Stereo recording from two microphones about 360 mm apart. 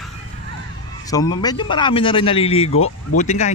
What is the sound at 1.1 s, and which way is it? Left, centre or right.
Speech, centre.